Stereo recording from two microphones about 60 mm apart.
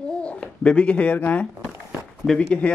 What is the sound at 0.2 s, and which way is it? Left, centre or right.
A child's voice, centre.